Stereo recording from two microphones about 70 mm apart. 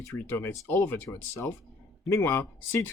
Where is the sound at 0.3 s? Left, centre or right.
Left.